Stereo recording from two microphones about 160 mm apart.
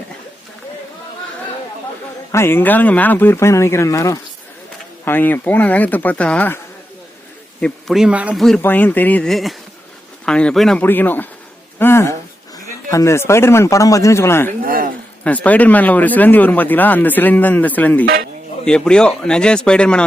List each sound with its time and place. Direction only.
2.3 s speech: 15° left (ahead or behind)
7.6 s speech: centre (ahead or behind)
8.4 s speech: 5° left (ahead or behind)
14.6 s speech: 65° right (ahead or behind)
15.2 s speech: 10° left (ahead or behind)